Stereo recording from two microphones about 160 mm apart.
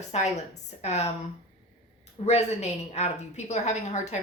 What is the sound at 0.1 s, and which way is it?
A woman's voice, 45° left (ahead or behind).